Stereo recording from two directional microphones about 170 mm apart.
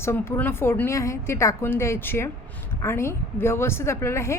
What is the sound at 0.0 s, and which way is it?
A woman's voice, 15° left (ahead or behind).